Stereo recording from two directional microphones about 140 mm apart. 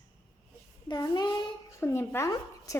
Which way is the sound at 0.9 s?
30° left (ahead or behind).